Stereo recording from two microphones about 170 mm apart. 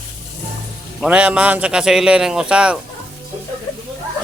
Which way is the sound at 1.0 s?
5° right (ahead or behind).